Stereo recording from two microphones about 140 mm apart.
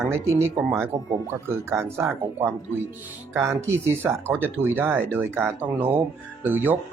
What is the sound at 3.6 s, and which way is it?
Speech, 20° right (ahead or behind).